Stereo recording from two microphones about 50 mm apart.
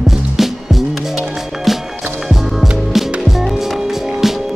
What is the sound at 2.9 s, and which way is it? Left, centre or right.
Music, centre.